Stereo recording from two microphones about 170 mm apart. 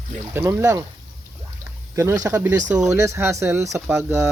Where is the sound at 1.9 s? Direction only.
20° right (ahead or behind).